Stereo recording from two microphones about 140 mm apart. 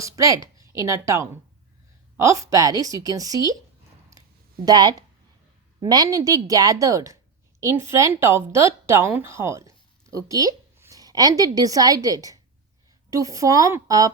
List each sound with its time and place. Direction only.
0.0 s a woman's voice: 25° right (ahead or behind)
4.6 s a woman's voice: 30° right (ahead or behind)